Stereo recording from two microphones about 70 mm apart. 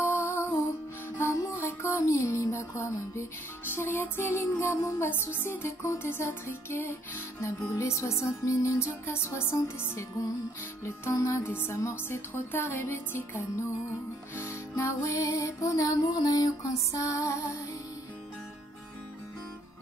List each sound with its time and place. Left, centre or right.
0.0 s music: left
16.1 s music: left